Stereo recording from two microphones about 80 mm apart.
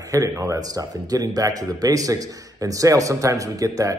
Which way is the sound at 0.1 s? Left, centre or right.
Right.